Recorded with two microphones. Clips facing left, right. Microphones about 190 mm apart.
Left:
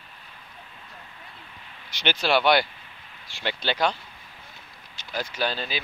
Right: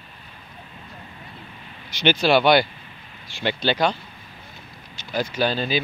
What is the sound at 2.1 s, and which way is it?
Speech, 5° right (ahead or behind).